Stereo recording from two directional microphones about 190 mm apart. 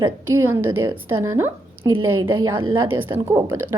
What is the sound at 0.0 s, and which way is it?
Speech, 15° right (ahead or behind).